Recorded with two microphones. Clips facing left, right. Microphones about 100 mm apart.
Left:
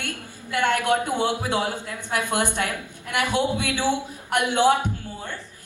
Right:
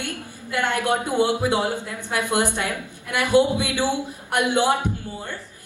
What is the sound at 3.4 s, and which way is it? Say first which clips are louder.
A woman's voice: right 3 dB; 15° right (ahead or behind).